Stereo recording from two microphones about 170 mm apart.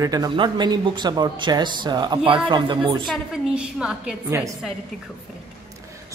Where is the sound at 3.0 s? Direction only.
Centre (ahead or behind).